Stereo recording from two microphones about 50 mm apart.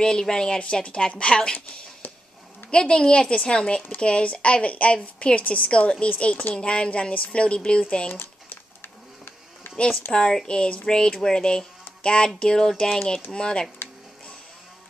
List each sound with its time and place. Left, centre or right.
0.0 s a woman's voice: centre
8.1 s typing: left
10.1 s speech: centre